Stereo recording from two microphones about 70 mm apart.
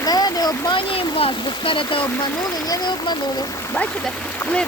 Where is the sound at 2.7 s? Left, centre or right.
Left.